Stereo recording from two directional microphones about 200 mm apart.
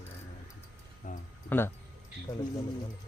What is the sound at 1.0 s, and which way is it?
Speech, 40° left (ahead or behind).